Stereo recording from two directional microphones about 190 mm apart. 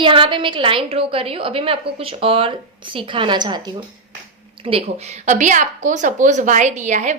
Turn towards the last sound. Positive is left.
turn(degrees=-40)  # may be behind; listen again after turning